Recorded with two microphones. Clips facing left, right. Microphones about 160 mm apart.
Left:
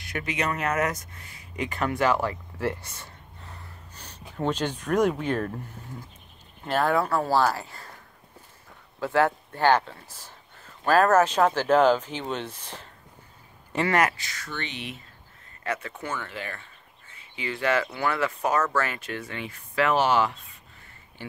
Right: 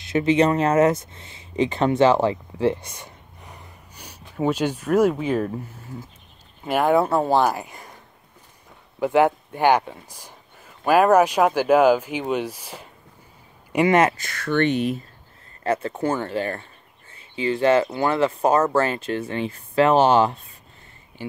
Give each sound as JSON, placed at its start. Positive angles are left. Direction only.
{"t": 0.0, "sound": "speech", "side_deg": -25}
{"t": 9.0, "sound": "speech", "side_deg": -15}
{"t": 13.7, "sound": "speech", "side_deg": -20}
{"t": 14.1, "sound": "speech", "side_deg": -55}
{"t": 15.6, "sound": "speech", "side_deg": -35}